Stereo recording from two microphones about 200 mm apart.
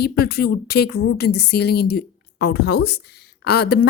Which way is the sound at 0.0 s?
50° left (ahead or behind).